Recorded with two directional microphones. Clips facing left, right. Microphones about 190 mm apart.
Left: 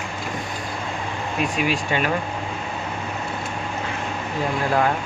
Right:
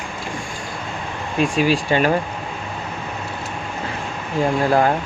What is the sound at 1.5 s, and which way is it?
Speech, 30° right (ahead or behind).